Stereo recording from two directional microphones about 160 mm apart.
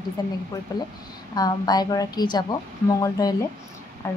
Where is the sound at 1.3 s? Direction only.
25° left (ahead or behind).